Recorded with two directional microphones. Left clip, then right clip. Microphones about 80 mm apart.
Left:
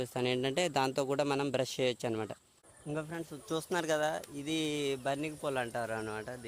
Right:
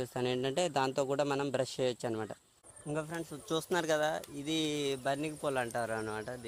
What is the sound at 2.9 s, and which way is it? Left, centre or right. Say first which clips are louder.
Speech: right 1 dB; centre.